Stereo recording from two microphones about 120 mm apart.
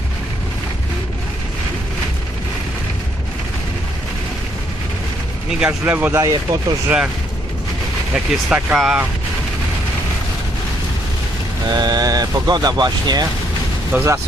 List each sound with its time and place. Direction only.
5.5 s speech: 10° right (ahead or behind)
6.1 s speech: 30° right (ahead or behind)
6.8 s speech: 10° right (ahead or behind)
8.1 s speech: 5° right (ahead or behind)
11.7 s speech: 35° right (ahead or behind)
13.9 s speech: 20° right (ahead or behind)